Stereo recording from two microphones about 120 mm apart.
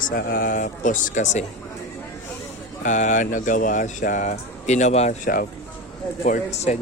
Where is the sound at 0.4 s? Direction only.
90° left.